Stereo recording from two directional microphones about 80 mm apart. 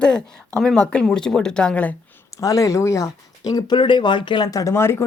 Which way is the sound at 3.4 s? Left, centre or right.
Left.